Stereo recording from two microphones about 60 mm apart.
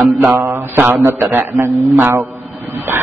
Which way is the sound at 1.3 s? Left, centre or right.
Right.